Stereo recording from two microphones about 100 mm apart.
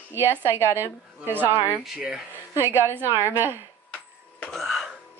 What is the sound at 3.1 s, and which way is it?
Speech, 30° left (ahead or behind).